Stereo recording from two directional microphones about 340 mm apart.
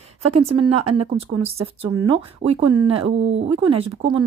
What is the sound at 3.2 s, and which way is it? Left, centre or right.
Speech, right.